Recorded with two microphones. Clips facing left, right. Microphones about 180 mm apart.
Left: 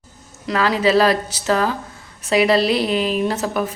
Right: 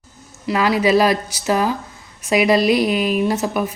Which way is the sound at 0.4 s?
10° right (ahead or behind).